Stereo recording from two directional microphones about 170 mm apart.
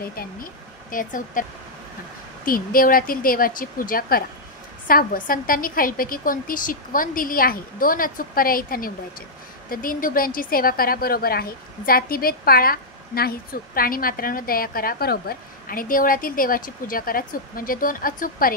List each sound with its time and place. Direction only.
0.0 s a woman's voice: 60° left (ahead or behind)
2.4 s a woman's voice: 55° left (ahead or behind)